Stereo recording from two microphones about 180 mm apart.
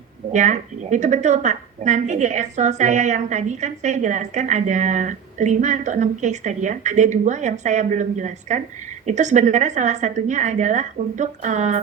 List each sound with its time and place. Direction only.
0.3 s a woman's voice: 40° right (ahead or behind)